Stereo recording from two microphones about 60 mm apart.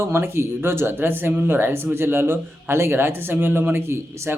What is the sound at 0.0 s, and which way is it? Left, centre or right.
Speech, right.